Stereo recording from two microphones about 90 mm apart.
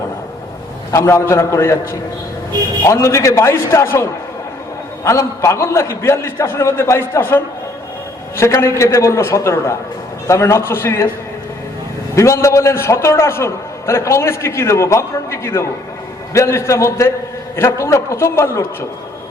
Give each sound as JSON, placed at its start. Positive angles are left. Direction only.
{"t": 0.9, "sound": "a man's voice", "side_deg": 35}
{"t": 12.1, "sound": "a man's voice", "side_deg": 35}